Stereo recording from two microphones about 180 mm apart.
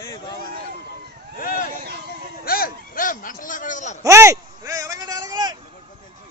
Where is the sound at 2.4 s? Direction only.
55° left (ahead or behind).